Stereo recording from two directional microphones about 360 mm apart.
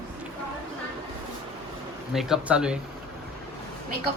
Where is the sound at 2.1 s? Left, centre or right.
Centre.